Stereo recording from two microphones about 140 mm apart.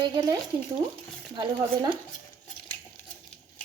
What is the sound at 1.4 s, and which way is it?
Speech, 30° right (ahead or behind).